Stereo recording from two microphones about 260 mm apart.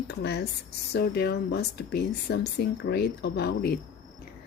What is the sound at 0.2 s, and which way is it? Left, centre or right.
A woman's voice, left.